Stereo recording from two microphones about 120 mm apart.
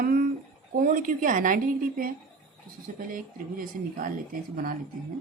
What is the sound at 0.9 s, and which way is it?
Speech, 90° right.